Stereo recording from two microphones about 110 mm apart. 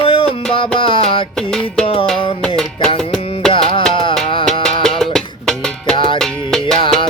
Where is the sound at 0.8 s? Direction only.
50° left (ahead or behind).